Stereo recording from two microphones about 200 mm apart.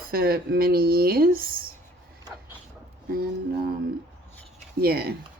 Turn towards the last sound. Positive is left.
turn(degrees=-50)  # may be behind; listen again after turning